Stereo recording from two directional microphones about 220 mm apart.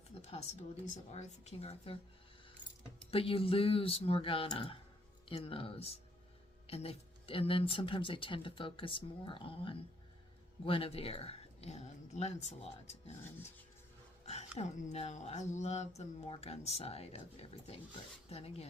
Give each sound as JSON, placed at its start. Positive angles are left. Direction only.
{"t": 1.1, "sound": "speech", "side_deg": 30}
{"t": 3.1, "sound": "speech", "side_deg": 25}
{"t": 14.3, "sound": "speech", "side_deg": 30}